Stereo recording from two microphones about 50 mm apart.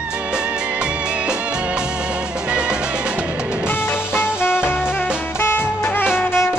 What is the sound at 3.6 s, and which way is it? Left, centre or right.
Music, left.